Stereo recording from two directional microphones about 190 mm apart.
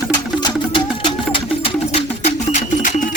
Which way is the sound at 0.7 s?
25° left (ahead or behind).